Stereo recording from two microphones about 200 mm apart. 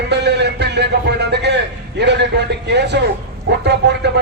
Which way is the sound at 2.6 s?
60° right (ahead or behind).